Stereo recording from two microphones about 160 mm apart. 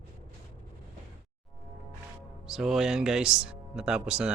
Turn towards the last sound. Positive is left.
turn(degrees=-5)  # may be behind; listen again after turning